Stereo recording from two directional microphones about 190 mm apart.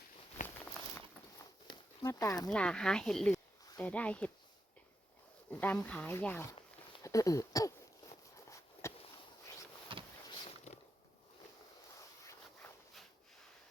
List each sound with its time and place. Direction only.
0.4 s walk: 10° left (ahead or behind)
2.0 s speech: 20° left (ahead or behind)
2.5 s speech: 5° left (ahead or behind)
5.5 s speech: 10° left (ahead or behind)
7.0 s a sound: 15° left (ahead or behind)
10.7 s a sound: 35° left (ahead or behind)